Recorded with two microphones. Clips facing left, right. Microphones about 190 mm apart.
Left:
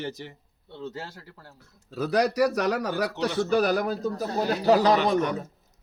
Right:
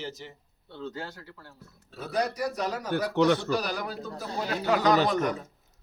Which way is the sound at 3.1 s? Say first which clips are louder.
Right 6 dB; 65° right (ahead or behind).